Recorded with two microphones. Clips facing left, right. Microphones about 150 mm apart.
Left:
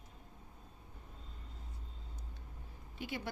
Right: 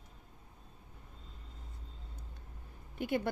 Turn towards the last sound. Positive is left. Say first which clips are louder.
# right 8 dB
turn(degrees=-55)  # may be behind; listen again after turning